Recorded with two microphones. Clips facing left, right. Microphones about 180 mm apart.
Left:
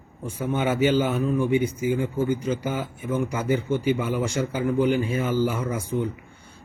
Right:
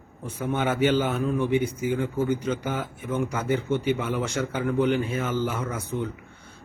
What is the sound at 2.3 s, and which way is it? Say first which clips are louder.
A man's voice: left 1 dB; 10° left (ahead or behind).